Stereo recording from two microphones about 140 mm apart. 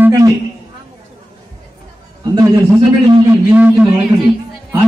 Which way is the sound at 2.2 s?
30° right (ahead or behind).